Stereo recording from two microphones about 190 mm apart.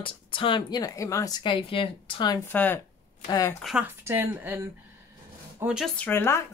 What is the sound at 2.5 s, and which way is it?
A woman's voice, 10° left (ahead or behind).